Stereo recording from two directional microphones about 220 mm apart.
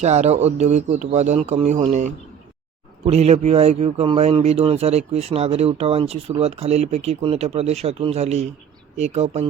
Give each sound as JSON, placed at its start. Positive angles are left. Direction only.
{"t": 0.0, "sound": "speech", "side_deg": -30}